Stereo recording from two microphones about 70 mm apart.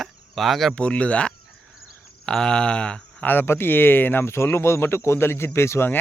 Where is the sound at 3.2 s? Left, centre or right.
Left.